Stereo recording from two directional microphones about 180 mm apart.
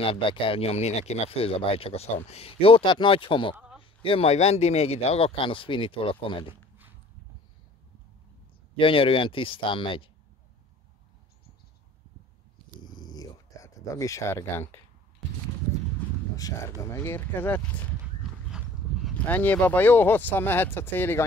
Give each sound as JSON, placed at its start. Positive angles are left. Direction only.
{"t": 0.0, "sound": "speech", "side_deg": 30}
{"t": 3.5, "sound": "a sound", "side_deg": -5}
{"t": 4.0, "sound": "speech", "side_deg": 30}
{"t": 8.7, "sound": "speech", "side_deg": 30}
{"t": 12.8, "sound": "purr", "side_deg": 25}
{"t": 16.3, "sound": "speech", "side_deg": 20}
{"t": 19.2, "sound": "speech", "side_deg": 10}